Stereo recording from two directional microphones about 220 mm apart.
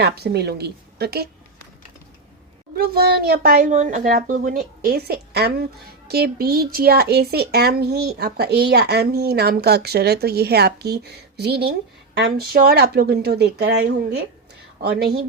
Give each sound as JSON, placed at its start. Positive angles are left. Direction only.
{"t": 0.0, "sound": "speech", "side_deg": -45}
{"t": 2.7, "sound": "a child's voice", "side_deg": -45}